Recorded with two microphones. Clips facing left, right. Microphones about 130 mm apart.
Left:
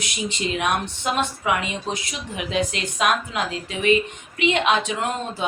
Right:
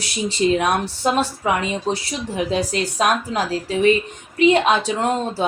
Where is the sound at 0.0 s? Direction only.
35° right (ahead or behind).